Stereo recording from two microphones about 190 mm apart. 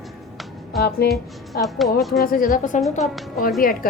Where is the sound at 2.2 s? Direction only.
45° left (ahead or behind).